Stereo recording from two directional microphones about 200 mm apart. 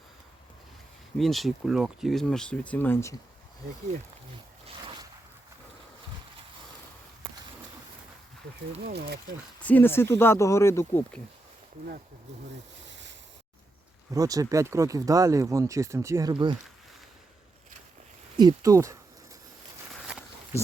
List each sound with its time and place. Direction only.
1.2 s speech: centre (ahead or behind)
8.9 s speech: 55° right (ahead or behind)
9.6 s speech: 10° left (ahead or behind)
12.8 s a sound: 65° right (ahead or behind)
14.1 s speech: 15° right (ahead or behind)
18.3 s speech: 20° right (ahead or behind)
19.9 s walk: centre (ahead or behind)